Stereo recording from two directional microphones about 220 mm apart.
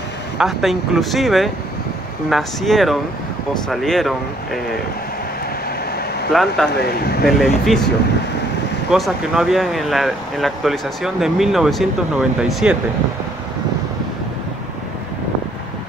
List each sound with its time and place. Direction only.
0.4 s speech: centre (ahead or behind)
6.3 s speech: centre (ahead or behind)
6.8 s speech: 45° left (ahead or behind)
7.2 s speech: centre (ahead or behind)
8.9 s speech: centre (ahead or behind)